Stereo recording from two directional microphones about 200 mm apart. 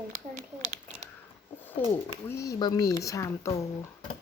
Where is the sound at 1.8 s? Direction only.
10° left (ahead or behind).